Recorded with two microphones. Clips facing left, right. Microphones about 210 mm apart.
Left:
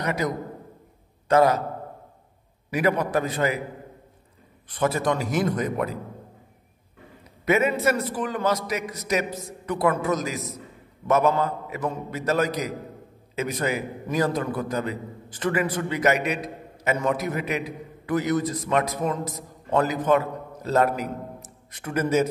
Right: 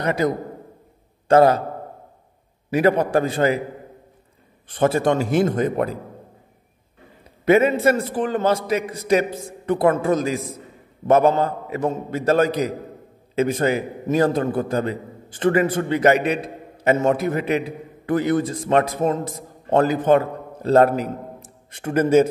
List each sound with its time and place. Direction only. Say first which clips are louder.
0.0 s a man's voice: right 5 dB; 30° right (ahead or behind)
2.7 s a man's voice: right 5 dB; 30° right (ahead or behind)
4.6 s a man's voice: right 5 dB; 30° right (ahead or behind)
7.4 s a man's voice: right 6 dB; 30° right (ahead or behind)